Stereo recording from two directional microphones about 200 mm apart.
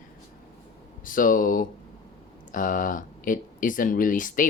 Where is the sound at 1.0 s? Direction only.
45° left (ahead or behind).